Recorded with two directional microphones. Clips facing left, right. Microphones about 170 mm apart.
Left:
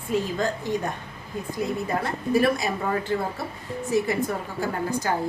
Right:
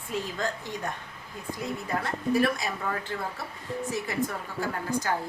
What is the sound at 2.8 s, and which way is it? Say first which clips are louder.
A woman's voice: left 8 dB; 25° left (ahead or behind).